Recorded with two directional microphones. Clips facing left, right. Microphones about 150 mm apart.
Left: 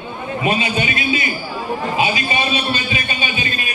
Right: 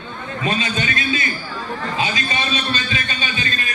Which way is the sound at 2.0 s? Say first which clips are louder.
Left 4 dB; 15° left (ahead or behind).